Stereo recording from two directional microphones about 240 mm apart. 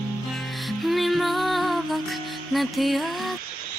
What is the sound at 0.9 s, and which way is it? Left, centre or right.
Music, centre.